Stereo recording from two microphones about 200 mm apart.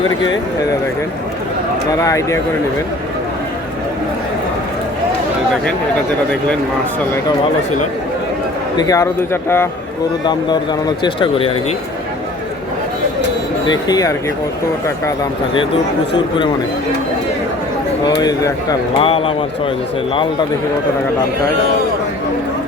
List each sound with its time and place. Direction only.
1.9 s speech: 15° left (ahead or behind)
8.8 s speech: 15° left (ahead or behind)
13.7 s speech: 20° left (ahead or behind)
18.2 s speech: 20° left (ahead or behind)